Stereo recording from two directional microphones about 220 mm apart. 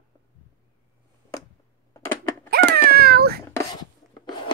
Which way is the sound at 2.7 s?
45° right (ahead or behind).